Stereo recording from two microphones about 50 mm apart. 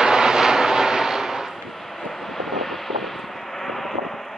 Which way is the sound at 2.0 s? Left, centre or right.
Centre.